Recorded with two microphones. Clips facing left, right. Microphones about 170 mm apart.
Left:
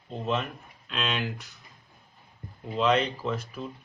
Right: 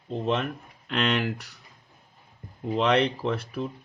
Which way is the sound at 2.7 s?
65° right (ahead or behind).